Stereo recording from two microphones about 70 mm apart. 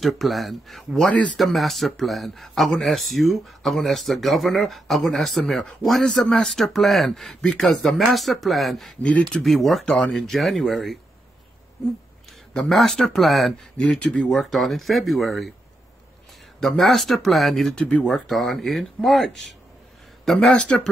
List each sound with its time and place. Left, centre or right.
0.0 s speech: centre
1.0 s speech: centre
1.4 s speech: centre
9.9 s speech: centre
10.2 s speech: centre
12.5 s speech: centre
13.7 s speech: centre
14.3 s speech: centre
16.5 s speech: centre